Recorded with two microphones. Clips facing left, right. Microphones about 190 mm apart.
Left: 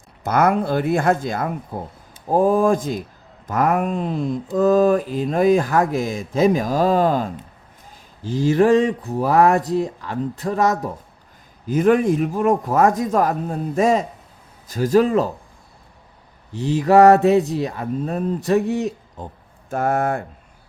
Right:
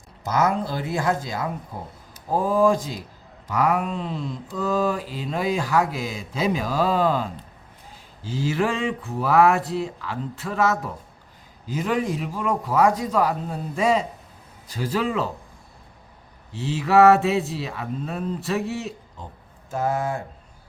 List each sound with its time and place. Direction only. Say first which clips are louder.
0.3 s speech: left 5 dB; 60° left (ahead or behind)
2.3 s mantra: left 4 dB; 50° left (ahead or behind)
8.5 s a sound: left 11 dB; 40° left (ahead or behind)
9.6 s mantra: left 5 dB; 45° left (ahead or behind)
11.6 s mantra: left 8 dB; 55° left (ahead or behind)
16.6 s a sound: left 4 dB; 40° left (ahead or behind)
17.5 s mantra: left 7 dB; 45° left (ahead or behind)
19.7 s speech: left 4 dB; 60° left (ahead or behind)